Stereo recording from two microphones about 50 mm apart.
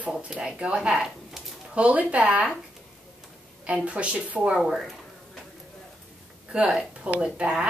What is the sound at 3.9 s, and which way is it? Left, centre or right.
Speech, right.